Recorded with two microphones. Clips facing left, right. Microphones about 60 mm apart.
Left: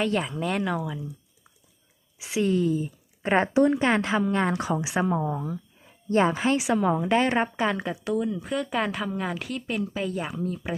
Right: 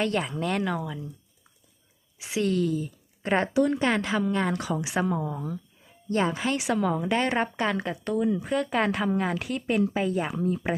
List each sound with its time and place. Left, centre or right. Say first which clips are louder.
0.0 s speech: left 1 dB; centre
2.1 s speech: left 2 dB; centre
7.3 s a woman's voice: left 2 dB; centre
7.8 s speech: even; centre
9.5 s speech: right 4 dB; centre